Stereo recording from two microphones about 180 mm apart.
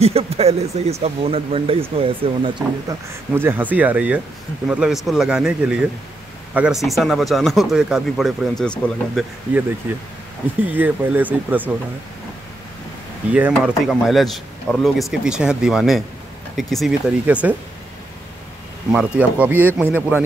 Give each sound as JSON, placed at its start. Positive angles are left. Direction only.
{"t": 0.0, "sound": "speech", "side_deg": -35}
{"t": 2.9, "sound": "speech", "side_deg": -10}
{"t": 10.6, "sound": "speech", "side_deg": -10}
{"t": 13.3, "sound": "speech", "side_deg": -5}
{"t": 18.9, "sound": "speech", "side_deg": -5}